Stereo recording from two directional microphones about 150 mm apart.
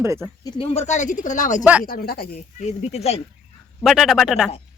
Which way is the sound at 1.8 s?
80° left.